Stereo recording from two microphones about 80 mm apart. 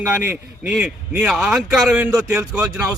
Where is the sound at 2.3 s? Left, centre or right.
Right.